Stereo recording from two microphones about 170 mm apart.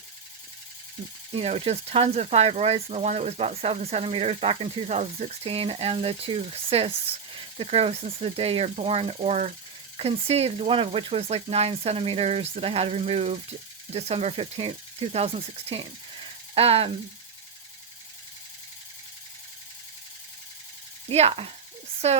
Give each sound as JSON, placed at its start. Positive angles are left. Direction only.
{"t": 1.3, "sound": "speech", "side_deg": -35}
{"t": 21.1, "sound": "speech", "side_deg": -35}